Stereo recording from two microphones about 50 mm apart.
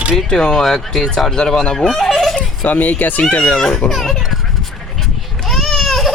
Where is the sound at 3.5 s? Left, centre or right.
Centre.